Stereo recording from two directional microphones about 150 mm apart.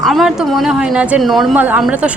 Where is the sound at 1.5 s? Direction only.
10° right (ahead or behind).